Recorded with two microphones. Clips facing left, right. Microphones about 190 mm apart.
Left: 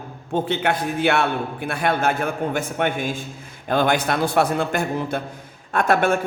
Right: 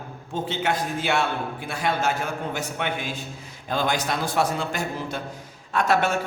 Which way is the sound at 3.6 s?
60° left (ahead or behind).